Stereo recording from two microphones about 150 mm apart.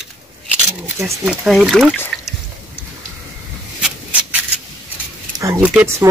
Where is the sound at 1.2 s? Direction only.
5° right (ahead or behind).